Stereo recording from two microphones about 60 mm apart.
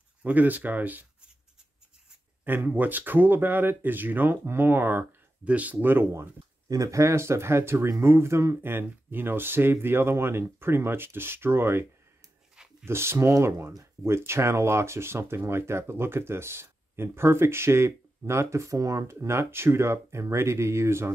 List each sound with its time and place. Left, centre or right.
0.2 s speech: right
2.4 s speech: right
5.4 s speech: right
6.7 s speech: right
8.7 s speech: right
12.8 s speech: right